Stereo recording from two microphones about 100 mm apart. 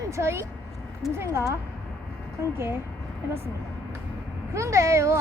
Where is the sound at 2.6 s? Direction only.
25° right (ahead or behind).